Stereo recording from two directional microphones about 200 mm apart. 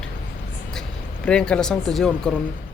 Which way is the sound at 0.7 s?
5° left (ahead or behind).